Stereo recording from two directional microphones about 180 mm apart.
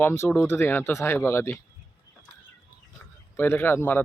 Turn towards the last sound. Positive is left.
turn(degrees=10)  # may be behind; listen again after turning